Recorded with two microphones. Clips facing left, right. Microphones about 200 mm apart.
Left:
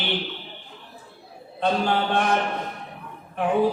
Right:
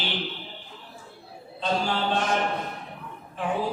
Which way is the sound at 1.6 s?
60° left (ahead or behind).